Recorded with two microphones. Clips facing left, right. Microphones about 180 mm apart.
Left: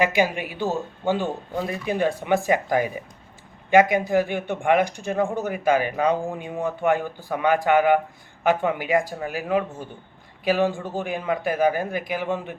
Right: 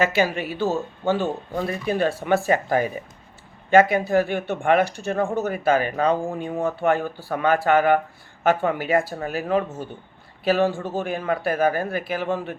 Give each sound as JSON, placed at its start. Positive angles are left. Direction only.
{"t": 0.0, "sound": "speech", "side_deg": 15}